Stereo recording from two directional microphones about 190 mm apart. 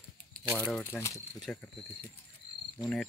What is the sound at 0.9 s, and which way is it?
Speech, centre (ahead or behind).